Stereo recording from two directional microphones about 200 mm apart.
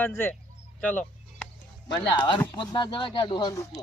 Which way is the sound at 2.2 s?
20° left (ahead or behind).